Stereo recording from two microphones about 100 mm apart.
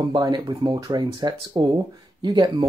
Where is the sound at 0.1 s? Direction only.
45° right (ahead or behind).